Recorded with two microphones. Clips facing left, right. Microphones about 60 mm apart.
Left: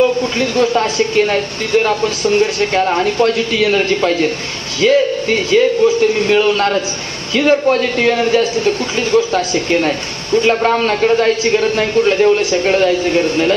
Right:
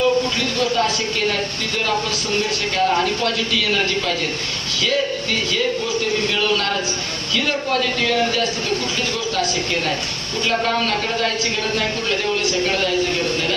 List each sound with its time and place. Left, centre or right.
0.4 s a man's voice: left